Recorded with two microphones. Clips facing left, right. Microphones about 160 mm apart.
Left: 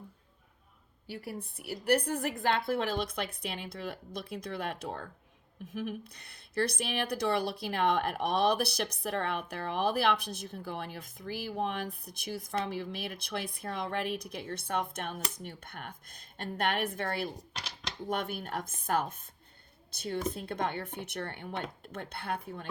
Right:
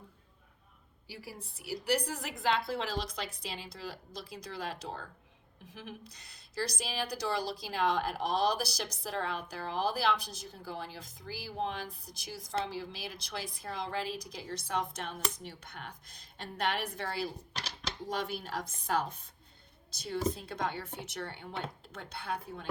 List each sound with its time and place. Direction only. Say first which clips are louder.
1.0 s speech: left 6 dB; 55° left (ahead or behind)
20.3 s speech: left 3 dB; 55° left (ahead or behind)